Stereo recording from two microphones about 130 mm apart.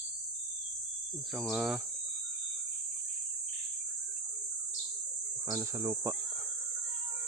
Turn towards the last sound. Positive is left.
turn(degrees=-20)  # may be behind; listen again after turning